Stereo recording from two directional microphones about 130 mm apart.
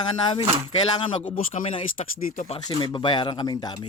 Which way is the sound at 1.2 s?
75° left (ahead or behind).